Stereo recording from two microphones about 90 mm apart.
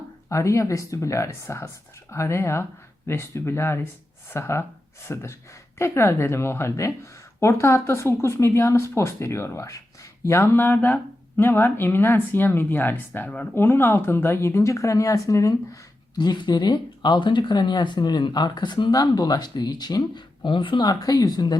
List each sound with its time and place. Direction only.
0.3 s speech: 35° left (ahead or behind)
16.1 s speech: 55° left (ahead or behind)